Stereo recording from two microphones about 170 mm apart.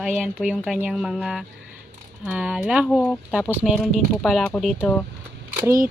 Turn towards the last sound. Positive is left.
turn(degrees=-15)  # may be behind; listen again after turning